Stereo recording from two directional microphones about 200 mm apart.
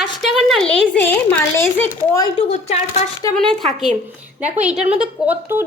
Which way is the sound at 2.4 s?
35° left (ahead or behind).